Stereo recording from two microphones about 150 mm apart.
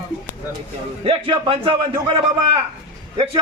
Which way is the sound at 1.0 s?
35° right (ahead or behind).